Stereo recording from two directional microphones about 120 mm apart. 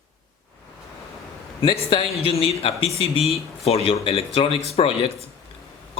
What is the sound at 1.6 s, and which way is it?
Speech, 50° left (ahead or behind).